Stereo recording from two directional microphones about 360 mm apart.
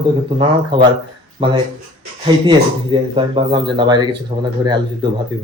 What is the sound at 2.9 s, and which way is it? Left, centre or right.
Speech, centre.